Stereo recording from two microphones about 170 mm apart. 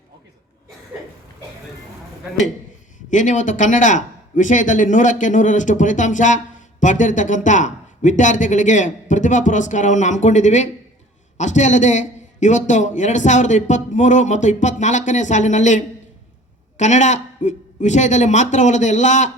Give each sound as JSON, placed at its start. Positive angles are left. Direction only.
{"t": 3.1, "sound": "speech", "side_deg": 45}